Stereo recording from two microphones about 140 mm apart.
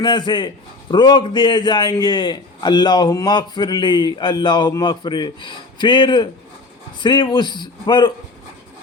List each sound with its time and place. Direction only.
0.0 s a man's voice: 35° left (ahead or behind)